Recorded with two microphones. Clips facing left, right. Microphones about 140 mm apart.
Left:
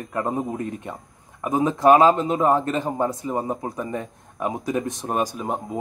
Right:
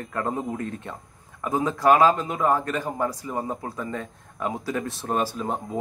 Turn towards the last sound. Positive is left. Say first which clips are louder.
# left 1 dB
turn(degrees=15)  # may be behind; listen again after turning